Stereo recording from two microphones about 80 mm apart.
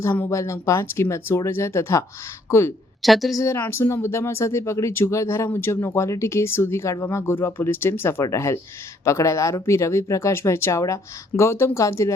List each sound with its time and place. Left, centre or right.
0.0 s speech: left
0.3 s speech: left
3.0 s a woman's voice: centre
3.3 s speech: left